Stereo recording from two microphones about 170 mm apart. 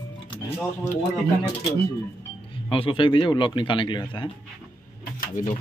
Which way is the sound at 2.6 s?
30° left (ahead or behind).